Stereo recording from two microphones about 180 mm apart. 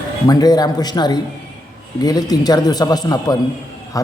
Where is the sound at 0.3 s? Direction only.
20° left (ahead or behind).